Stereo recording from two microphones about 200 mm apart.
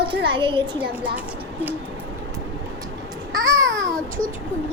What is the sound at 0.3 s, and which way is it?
Speech, 25° right (ahead or behind).